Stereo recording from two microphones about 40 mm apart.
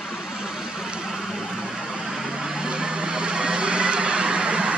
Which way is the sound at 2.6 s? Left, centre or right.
Right.